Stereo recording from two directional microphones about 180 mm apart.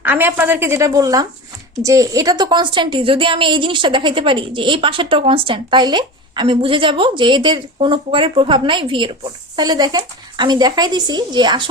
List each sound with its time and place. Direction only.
0.0 s a woman's voice: 10° right (ahead or behind)